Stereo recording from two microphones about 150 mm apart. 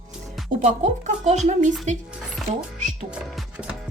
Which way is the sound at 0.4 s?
50° right (ahead or behind).